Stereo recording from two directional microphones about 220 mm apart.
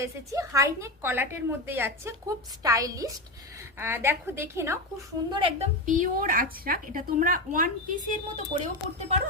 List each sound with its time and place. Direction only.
0.0 s a woman's voice: 15° right (ahead or behind)
5.3 s a woman's voice: 25° right (ahead or behind)